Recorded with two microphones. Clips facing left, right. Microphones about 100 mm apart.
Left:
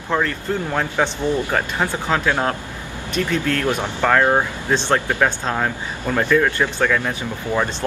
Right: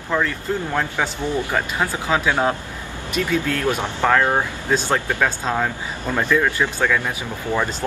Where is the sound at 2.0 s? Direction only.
10° right (ahead or behind).